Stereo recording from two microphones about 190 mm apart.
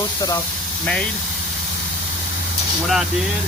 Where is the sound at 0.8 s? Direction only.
5° left (ahead or behind).